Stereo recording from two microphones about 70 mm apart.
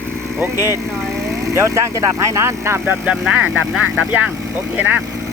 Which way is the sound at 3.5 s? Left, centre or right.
Centre.